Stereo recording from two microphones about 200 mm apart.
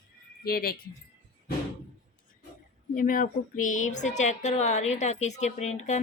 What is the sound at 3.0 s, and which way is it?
Speech, 45° left (ahead or behind).